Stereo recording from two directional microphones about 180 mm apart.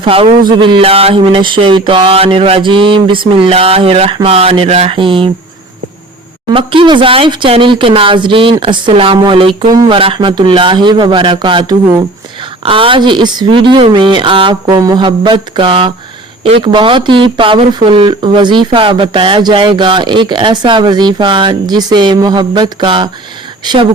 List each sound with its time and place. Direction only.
0.0 s speech: 30° right (ahead or behind)
6.5 s speech: 30° right (ahead or behind)